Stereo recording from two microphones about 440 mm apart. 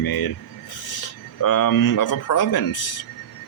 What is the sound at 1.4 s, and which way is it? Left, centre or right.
Speech, left.